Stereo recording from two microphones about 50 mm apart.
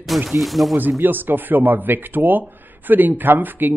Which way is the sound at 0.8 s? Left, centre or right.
Right.